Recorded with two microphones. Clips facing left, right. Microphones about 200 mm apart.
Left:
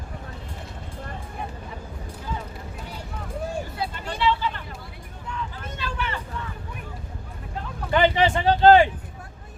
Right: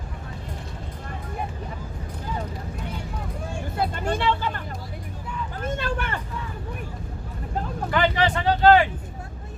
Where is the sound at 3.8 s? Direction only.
50° right (ahead or behind).